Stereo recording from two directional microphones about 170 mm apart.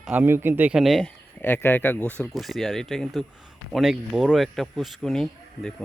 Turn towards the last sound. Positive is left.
turn(degrees=5)  # may be behind; listen again after turning